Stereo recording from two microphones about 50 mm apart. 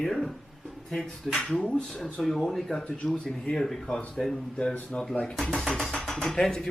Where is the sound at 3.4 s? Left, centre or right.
Centre.